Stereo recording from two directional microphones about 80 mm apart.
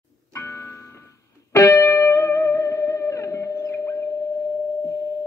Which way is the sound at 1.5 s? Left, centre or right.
Left.